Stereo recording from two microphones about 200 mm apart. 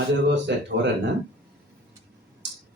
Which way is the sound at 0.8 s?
65° right (ahead or behind).